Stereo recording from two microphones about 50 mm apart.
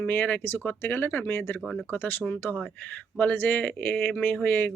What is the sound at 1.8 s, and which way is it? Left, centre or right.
Speech, left.